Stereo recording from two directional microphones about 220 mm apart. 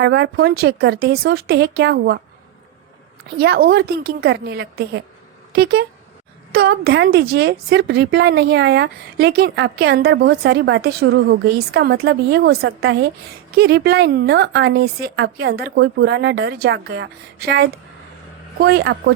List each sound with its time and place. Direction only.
0.0 s speech: 50° right (ahead or behind)
3.3 s speech: 45° right (ahead or behind)